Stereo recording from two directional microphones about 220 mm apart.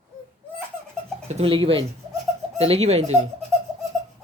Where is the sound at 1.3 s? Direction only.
25° right (ahead or behind).